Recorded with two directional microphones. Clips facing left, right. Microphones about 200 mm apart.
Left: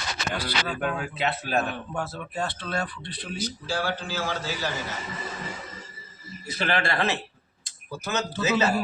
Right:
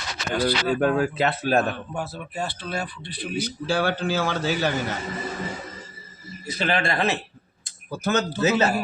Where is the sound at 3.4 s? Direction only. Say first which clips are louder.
Right 5 dB; 65° right (ahead or behind).